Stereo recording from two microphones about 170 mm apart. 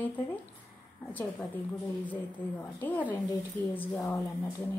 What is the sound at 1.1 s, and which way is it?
Speech, 10° left (ahead or behind).